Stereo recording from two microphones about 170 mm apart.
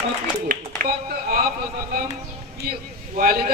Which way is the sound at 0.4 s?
55° right (ahead or behind).